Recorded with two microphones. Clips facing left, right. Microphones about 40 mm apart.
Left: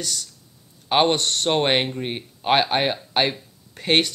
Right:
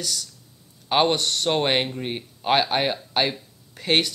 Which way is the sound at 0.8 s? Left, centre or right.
Centre.